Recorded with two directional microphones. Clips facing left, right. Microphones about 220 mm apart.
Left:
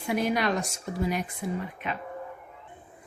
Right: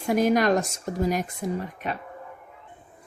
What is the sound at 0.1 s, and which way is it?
Speech, 45° right (ahead or behind).